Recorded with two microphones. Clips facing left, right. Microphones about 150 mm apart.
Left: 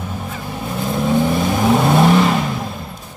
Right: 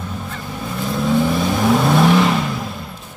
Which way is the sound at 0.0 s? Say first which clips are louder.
Left 1 dB; 20° left (ahead or behind).